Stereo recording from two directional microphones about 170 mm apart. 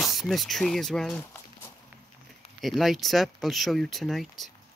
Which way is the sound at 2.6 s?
Centre (ahead or behind).